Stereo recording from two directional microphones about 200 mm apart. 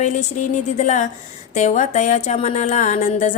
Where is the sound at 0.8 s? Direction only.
40° left (ahead or behind).